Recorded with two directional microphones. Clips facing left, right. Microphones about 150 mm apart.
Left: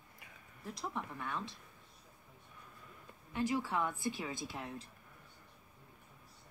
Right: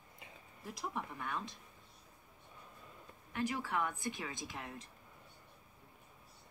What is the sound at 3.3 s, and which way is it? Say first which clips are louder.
Speech: left 2 dB; 20° left (ahead or behind).